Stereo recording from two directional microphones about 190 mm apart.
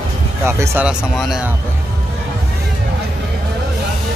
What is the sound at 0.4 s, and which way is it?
Speech, 10° right (ahead or behind).